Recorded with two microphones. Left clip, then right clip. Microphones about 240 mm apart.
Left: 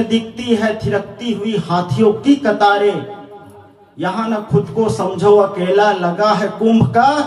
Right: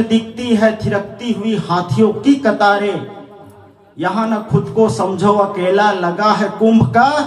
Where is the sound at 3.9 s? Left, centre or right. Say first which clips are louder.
Right 2 dB; right.